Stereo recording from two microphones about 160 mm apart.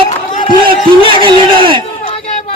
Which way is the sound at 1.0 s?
30° right (ahead or behind).